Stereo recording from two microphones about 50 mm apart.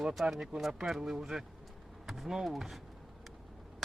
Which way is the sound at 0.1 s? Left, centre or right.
Centre.